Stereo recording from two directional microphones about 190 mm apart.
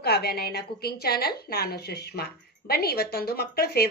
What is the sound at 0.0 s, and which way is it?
A woman's voice, 60° left (ahead or behind).